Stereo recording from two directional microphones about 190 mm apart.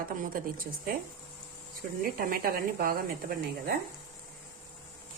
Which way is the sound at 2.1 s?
50° right (ahead or behind).